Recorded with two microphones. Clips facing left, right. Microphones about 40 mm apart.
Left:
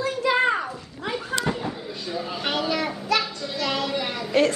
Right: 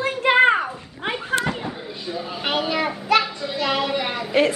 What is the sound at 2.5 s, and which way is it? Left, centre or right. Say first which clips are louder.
Child singing: right 3 dB; centre.